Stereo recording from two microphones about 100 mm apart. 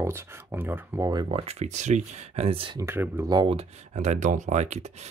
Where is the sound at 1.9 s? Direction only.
90° right.